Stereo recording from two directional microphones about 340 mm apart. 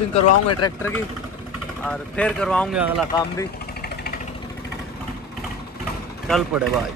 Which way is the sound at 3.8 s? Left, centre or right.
Left.